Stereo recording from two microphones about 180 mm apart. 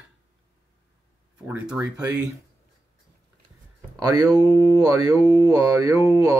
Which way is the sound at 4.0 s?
20° right (ahead or behind).